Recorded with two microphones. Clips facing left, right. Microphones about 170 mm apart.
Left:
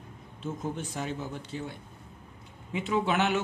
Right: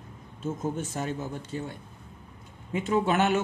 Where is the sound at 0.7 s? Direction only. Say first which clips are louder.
Right 3 dB; 45° right (ahead or behind).